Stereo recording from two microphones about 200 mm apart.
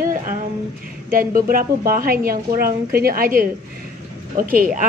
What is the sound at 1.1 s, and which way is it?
A woman's voice, 45° right (ahead or behind).